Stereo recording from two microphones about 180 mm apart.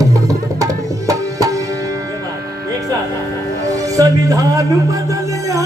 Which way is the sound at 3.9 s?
20° right (ahead or behind).